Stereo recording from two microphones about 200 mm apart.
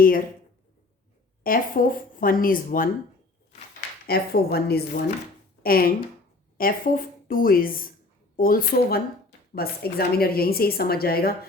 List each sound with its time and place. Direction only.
1.5 s a woman's voice: 45° left (ahead or behind)
4.0 s a woman's voice: 50° left (ahead or behind)